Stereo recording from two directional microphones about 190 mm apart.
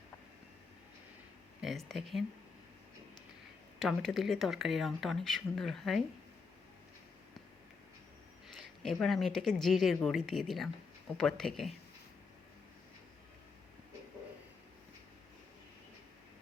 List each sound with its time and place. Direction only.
1.9 s speech: centre (ahead or behind)
3.8 s speech: centre (ahead or behind)
8.8 s speech: 5° left (ahead or behind)